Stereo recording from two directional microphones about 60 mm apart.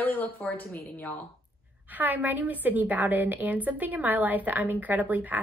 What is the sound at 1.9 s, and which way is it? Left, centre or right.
A woman's voice, right.